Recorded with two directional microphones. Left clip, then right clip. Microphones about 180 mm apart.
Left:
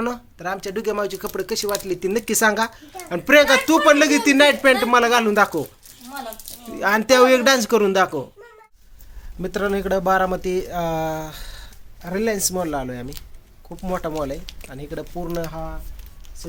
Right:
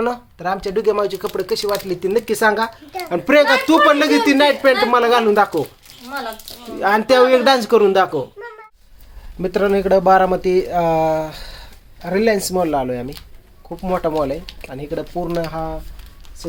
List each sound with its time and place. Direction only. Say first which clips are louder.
0.0 s speech: right 5 dB; 5° left (ahead or behind)
1.4 s speech: right 4 dB; 15° left (ahead or behind)
3.1 s speech: right 1 dB; centre (ahead or behind)
3.8 s speech: right 1 dB; 15° left (ahead or behind)
6.7 s speech: right 2 dB; 10° left (ahead or behind)
9.4 s speech: right 6 dB; centre (ahead or behind)